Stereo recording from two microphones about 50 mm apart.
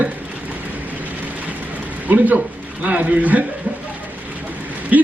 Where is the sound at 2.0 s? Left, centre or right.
Right.